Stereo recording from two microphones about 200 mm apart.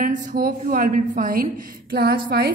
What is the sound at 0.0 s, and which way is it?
A woman's voice, 40° right (ahead or behind).